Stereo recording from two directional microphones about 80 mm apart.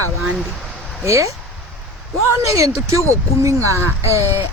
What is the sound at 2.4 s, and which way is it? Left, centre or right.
Speech, right.